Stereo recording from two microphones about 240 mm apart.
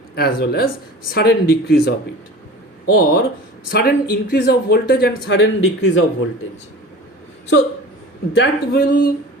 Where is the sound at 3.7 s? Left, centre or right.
Left.